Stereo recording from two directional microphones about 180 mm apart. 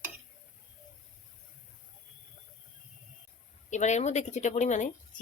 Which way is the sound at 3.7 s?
40° left (ahead or behind).